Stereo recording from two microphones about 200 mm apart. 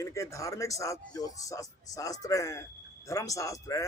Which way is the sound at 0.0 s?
15° left (ahead or behind).